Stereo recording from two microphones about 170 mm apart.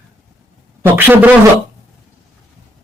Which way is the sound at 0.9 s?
10° right (ahead or behind).